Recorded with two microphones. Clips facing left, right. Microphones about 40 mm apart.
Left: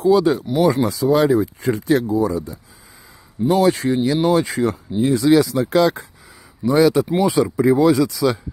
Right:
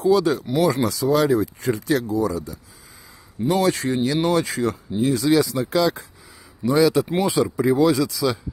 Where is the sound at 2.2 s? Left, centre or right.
Left.